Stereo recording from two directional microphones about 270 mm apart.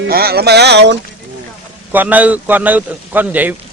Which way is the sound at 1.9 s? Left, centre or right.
Centre.